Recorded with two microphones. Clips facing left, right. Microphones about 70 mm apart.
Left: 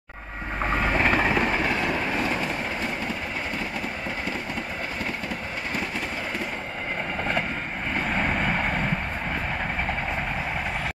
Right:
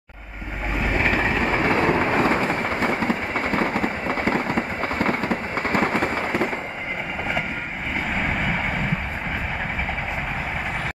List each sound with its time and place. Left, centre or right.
0.8 s train: centre
1.6 s train: right
8.1 s vehicle: centre